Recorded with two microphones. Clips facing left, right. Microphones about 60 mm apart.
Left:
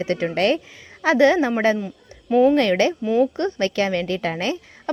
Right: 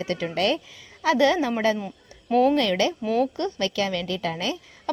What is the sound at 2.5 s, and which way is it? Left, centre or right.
A woman's voice, left.